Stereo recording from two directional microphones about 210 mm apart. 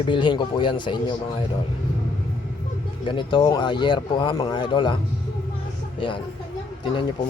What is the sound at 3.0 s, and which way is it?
Speech, 20° left (ahead or behind).